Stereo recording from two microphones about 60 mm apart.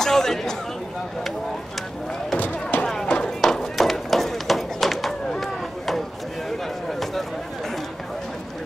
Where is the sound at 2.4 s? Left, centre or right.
Left.